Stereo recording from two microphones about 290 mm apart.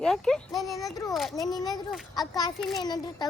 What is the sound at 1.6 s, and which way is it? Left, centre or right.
Speech, centre.